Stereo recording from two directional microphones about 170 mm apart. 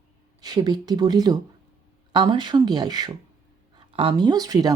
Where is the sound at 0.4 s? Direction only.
25° right (ahead or behind).